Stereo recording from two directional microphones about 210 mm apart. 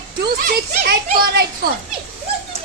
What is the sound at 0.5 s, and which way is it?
Speech, 50° right (ahead or behind).